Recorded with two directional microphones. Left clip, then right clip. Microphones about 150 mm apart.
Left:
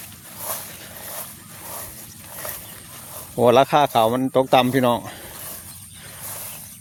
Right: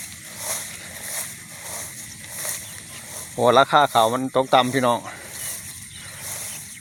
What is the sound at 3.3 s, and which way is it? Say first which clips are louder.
Speech: left 1 dB; 55° left (ahead or behind).